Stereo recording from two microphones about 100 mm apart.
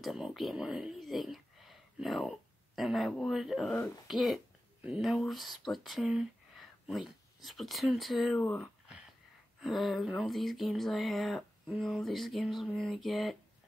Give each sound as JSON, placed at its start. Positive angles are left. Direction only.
{"t": 0.0, "sound": "speech", "side_deg": 0}
{"t": 8.4, "sound": "speech", "side_deg": 15}
{"t": 9.6, "sound": "speech", "side_deg": 0}